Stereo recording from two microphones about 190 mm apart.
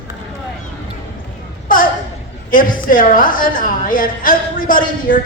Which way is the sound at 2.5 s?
45° left (ahead or behind).